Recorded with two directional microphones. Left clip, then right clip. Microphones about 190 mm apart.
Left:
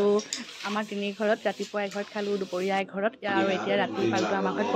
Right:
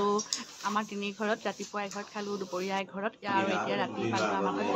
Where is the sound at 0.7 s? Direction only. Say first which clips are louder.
Left 1 dB; 10° left (ahead or behind).